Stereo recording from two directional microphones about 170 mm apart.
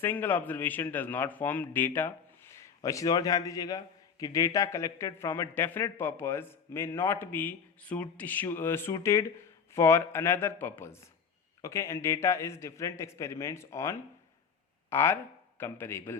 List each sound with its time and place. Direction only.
0.0 s a man's voice: 10° left (ahead or behind)